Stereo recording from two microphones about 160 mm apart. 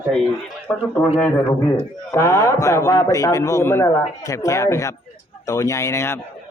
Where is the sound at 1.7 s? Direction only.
15° left (ahead or behind).